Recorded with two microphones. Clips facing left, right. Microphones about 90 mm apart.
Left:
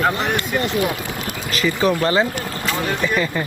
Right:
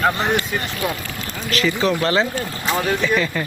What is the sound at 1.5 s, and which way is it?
Speech, 5° left (ahead or behind).